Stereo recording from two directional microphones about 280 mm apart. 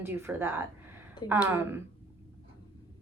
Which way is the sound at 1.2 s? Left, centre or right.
Centre.